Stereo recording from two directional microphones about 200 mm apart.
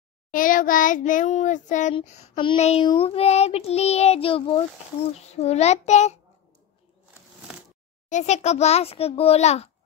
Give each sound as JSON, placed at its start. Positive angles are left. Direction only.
{"t": 0.3, "sound": "speech", "side_deg": 45}
{"t": 2.0, "sound": "child singing", "side_deg": 30}
{"t": 5.3, "sound": "speech", "side_deg": 30}
{"t": 8.1, "sound": "speech", "side_deg": 35}